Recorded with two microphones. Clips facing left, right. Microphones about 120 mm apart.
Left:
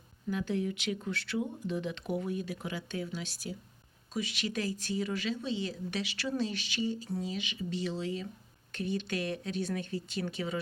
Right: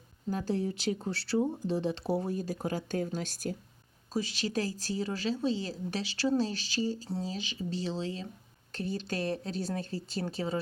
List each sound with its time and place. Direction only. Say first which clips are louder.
0.3 s speech: right 1 dB; 35° right (ahead or behind)
4.1 s speech: right 3 dB; 35° right (ahead or behind)